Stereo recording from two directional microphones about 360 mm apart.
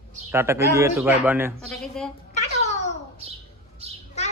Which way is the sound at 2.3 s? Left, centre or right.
Centre.